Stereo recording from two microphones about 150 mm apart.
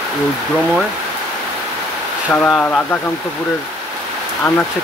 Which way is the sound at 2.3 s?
10° left (ahead or behind).